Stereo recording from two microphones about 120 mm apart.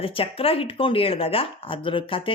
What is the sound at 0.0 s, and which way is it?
Speech, 50° left (ahead or behind).